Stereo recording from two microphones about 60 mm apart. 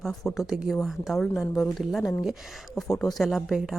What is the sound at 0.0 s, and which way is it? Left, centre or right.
A woman's voice, centre.